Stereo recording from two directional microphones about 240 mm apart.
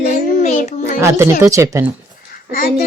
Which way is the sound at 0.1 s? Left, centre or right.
Left.